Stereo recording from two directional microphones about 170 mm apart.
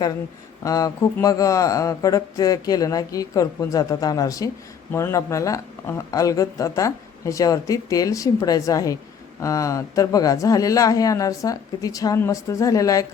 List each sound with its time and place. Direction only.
0.6 s speech: 20° left (ahead or behind)